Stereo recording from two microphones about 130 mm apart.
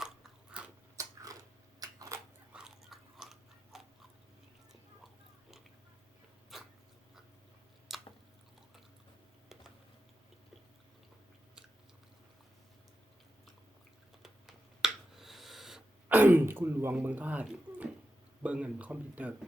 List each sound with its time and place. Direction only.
0.0 s biting: 5° right (ahead or behind)
0.9 s biting: 25° right (ahead or behind)
1.8 s a sound: 30° right (ahead or behind)
2.5 s biting: 5° right (ahead or behind)
6.5 s dog: centre (ahead or behind)
7.9 s chewing: centre (ahead or behind)
14.2 s owl: 5° right (ahead or behind)
16.0 s speech: 15° right (ahead or behind)